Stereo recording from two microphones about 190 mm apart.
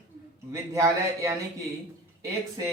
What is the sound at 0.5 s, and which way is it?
Speech, 15° right (ahead or behind).